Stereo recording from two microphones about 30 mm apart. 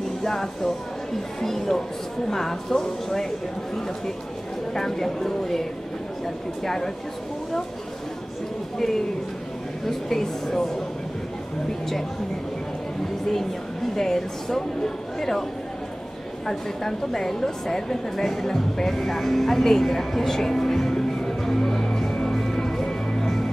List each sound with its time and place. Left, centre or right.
0.2 s a woman's voice: centre
4.7 s a woman's voice: centre
8.7 s a woman's voice: centre
13.9 s a woman's voice: centre
16.4 s a woman's voice: centre
21.3 s music: centre